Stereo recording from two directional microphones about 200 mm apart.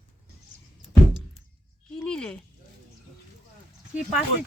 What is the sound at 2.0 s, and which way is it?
Speech, 5° left (ahead or behind).